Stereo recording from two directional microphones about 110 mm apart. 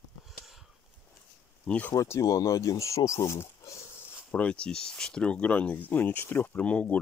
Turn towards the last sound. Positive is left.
turn(degrees=10)  # may be behind; listen again after turning